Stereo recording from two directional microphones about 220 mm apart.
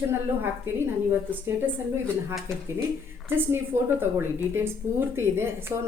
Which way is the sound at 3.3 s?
10° right (ahead or behind).